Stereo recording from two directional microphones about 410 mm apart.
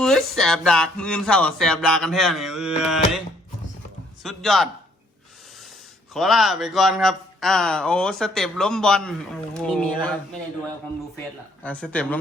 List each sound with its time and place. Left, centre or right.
0.0 s a man's voice: centre
4.2 s a man's voice: centre
6.1 s a man's voice: centre
11.6 s a man's voice: centre